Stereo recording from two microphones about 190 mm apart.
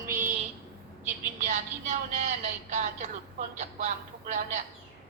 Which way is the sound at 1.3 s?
40° right (ahead or behind).